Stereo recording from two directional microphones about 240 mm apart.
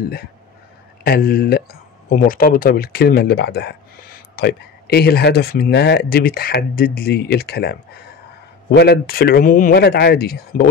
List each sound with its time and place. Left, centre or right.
1.0 s speech: left